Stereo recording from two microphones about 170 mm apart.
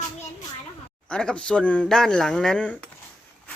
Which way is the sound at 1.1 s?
5° left (ahead or behind).